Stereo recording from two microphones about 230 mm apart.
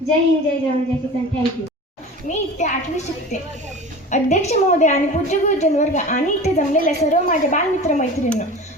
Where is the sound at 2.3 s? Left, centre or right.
Left.